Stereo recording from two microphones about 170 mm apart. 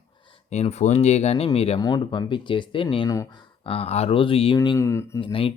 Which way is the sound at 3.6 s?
35° left (ahead or behind).